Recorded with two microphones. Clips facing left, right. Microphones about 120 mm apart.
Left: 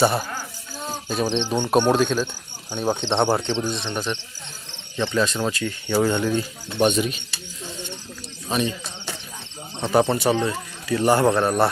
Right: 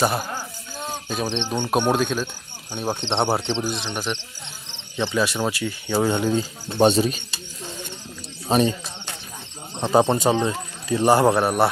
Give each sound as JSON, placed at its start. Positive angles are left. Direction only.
{"t": 0.0, "sound": "speech", "side_deg": 0}
{"t": 0.8, "sound": "cricket", "side_deg": 0}
{"t": 1.9, "sound": "speech", "side_deg": 0}
{"t": 3.1, "sound": "cricket", "side_deg": -25}
{"t": 3.3, "sound": "speech", "side_deg": -15}
{"t": 6.7, "sound": "speech", "side_deg": -35}
{"t": 8.4, "sound": "speech", "side_deg": -35}
{"t": 9.8, "sound": "speech", "side_deg": -20}